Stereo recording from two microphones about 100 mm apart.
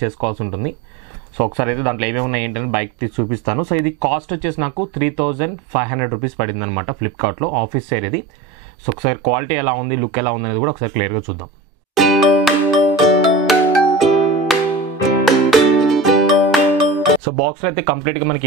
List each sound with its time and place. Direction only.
0.0 s speech: 20° right (ahead or behind)
11.9 s music: centre (ahead or behind)
17.4 s speech: 20° right (ahead or behind)